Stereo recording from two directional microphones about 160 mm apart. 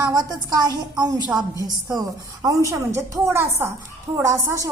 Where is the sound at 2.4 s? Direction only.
20° right (ahead or behind).